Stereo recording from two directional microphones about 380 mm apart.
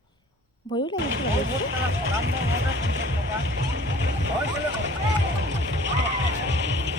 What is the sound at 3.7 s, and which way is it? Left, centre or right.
Music, right.